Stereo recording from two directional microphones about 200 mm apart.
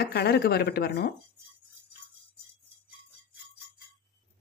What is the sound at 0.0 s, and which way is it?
Speech, 55° left (ahead or behind).